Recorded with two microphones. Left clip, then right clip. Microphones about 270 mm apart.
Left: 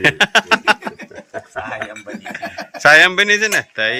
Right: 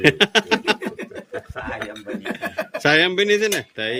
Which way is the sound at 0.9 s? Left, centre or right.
Right.